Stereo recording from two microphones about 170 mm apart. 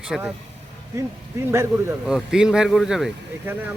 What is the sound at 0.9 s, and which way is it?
Speech, 15° right (ahead or behind).